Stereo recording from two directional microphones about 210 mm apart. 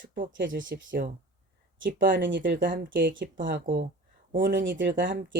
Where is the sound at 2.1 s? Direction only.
60° right (ahead or behind).